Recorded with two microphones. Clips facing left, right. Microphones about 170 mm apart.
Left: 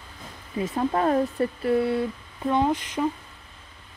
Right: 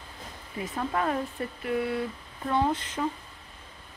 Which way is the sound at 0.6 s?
30° left (ahead or behind).